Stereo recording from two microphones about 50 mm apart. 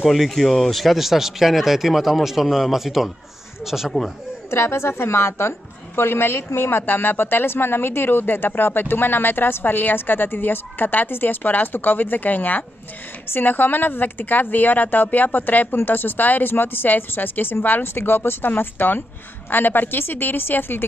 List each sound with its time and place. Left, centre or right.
0.0 s speech: centre
4.5 s a woman's voice: left
5.9 s a woman's voice: left